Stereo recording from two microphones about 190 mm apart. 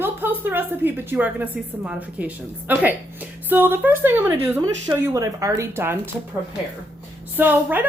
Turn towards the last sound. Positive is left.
turn(degrees=-10)  # may be behind; listen again after turning